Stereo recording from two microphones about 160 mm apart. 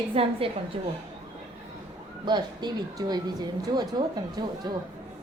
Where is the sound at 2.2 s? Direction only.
25° right (ahead or behind).